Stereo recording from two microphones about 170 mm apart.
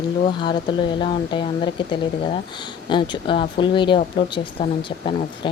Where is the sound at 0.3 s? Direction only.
25° left (ahead or behind).